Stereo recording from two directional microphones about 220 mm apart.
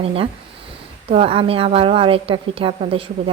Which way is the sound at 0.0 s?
25° right (ahead or behind).